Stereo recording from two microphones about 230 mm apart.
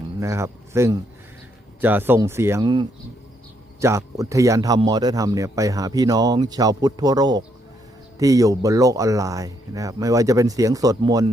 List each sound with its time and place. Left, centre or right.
0.2 s speech: centre